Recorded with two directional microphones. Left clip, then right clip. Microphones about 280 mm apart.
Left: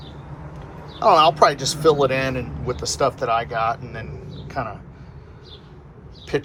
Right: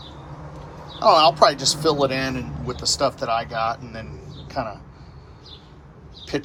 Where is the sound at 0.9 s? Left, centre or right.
Centre.